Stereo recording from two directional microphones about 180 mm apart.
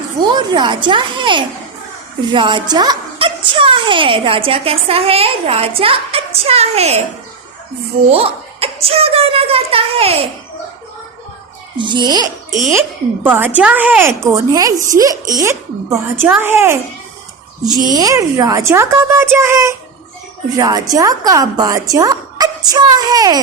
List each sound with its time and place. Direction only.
0.2 s a woman's voice: 25° right (ahead or behind)
8.1 s a woman's voice: 35° right (ahead or behind)
11.8 s speech: 25° right (ahead or behind)
13.2 s speech: 10° right (ahead or behind)
14.7 s a woman's voice: 45° right (ahead or behind)
14.9 s speech: 20° right (ahead or behind)
17.9 s speech: 20° right (ahead or behind)